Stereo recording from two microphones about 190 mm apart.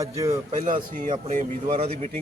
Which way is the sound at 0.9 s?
40° right (ahead or behind).